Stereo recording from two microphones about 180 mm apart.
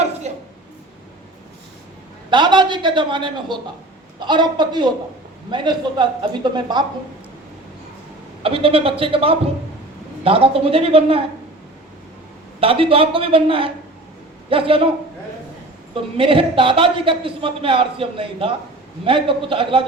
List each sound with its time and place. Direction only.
0.3 s a sound: 40° right (ahead or behind)
2.3 s a man's voice: 25° right (ahead or behind)
8.4 s a man's voice: 30° right (ahead or behind)
12.5 s a man's voice: 30° right (ahead or behind)
16.1 s a man's voice: 30° right (ahead or behind)